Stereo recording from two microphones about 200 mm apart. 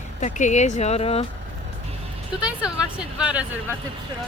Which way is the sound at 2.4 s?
5° right (ahead or behind).